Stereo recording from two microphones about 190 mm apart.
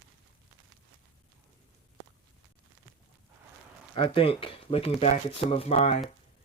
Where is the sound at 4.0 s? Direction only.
25° left (ahead or behind).